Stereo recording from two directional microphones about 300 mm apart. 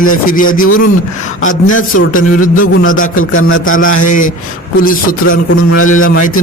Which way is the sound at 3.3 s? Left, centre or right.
Left.